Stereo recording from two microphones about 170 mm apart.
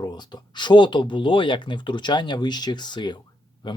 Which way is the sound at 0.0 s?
25° left (ahead or behind).